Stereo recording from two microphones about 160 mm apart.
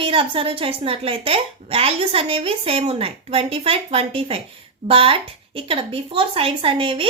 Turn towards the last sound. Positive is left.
turn(degrees=-35)  # may be behind; listen again after turning